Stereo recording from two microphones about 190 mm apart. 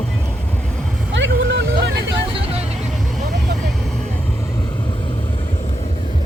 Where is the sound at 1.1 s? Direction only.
70° right (ahead or behind).